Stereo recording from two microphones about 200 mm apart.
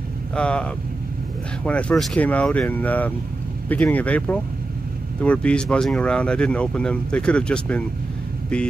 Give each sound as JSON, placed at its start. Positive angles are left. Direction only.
{"t": 0.4, "sound": "speech", "side_deg": 5}